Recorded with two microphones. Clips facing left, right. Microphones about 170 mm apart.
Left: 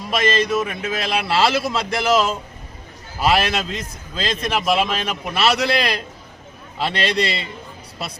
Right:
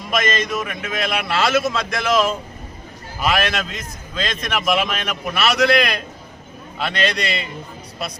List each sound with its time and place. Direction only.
0.1 s a man's voice: 30° left (ahead or behind)